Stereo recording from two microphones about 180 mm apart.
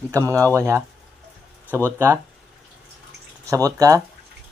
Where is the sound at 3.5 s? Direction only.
20° right (ahead or behind).